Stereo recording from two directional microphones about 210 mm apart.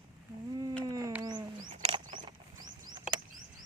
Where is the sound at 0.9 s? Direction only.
15° right (ahead or behind).